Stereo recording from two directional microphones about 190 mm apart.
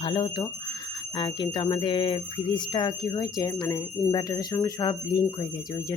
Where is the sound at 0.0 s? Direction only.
25° left (ahead or behind).